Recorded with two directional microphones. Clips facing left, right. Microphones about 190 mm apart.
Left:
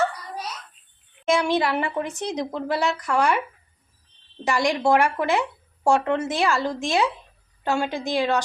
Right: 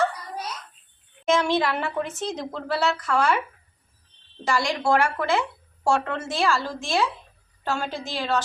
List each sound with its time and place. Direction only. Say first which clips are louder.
1.3 s speech: left 1 dB; 15° left (ahead or behind)
4.4 s speech: left 2 dB; 15° left (ahead or behind)